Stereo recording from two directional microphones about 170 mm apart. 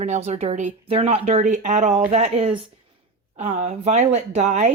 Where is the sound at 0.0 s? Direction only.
40° right (ahead or behind).